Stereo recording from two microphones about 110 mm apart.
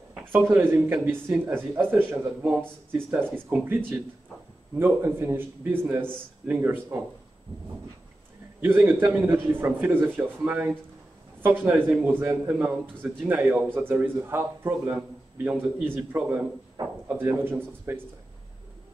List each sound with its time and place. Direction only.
0.2 s a man's voice: 20° right (ahead or behind)
3.3 s a man's voice: 20° right (ahead or behind)
8.5 s a man's voice: 20° right (ahead or behind)